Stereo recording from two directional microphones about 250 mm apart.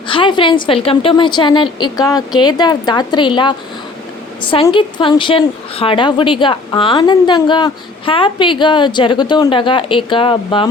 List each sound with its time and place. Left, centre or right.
0.1 s a woman's voice: centre
4.5 s a woman's voice: centre